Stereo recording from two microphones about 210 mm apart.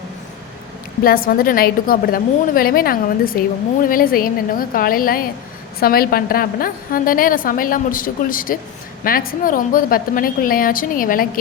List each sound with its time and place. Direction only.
1.0 s a woman's voice: 45° left (ahead or behind)